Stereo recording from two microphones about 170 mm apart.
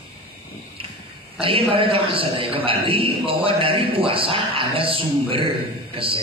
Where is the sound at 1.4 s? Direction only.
30° right (ahead or behind).